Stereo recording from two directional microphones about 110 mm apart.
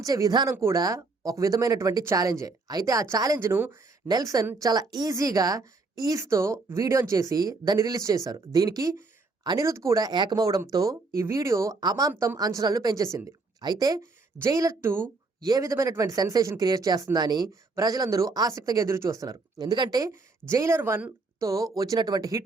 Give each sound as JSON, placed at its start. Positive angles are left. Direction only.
{"t": 0.0, "sound": "speech", "side_deg": -35}
{"t": 4.1, "sound": "speech", "side_deg": -35}
{"t": 14.0, "sound": "a woman's voice", "side_deg": -25}
{"t": 15.4, "sound": "speech", "side_deg": -35}
{"t": 20.5, "sound": "speech", "side_deg": -25}